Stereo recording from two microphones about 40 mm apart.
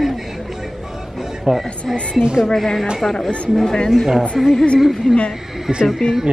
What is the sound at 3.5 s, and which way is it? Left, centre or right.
Speech, centre.